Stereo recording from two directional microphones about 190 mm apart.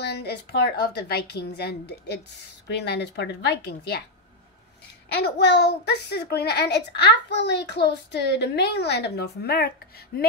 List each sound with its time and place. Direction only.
0.0 s a child's voice: 60° left (ahead or behind)
5.1 s a child's voice: 60° left (ahead or behind)